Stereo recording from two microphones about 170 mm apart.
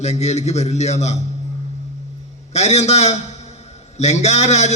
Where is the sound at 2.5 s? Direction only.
40° left (ahead or behind).